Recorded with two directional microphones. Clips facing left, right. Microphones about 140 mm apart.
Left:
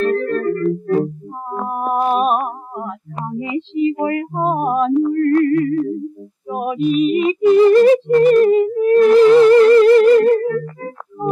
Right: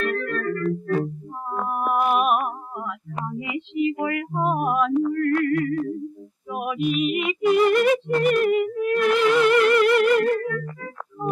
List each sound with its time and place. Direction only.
0.0 s music: 35° left (ahead or behind)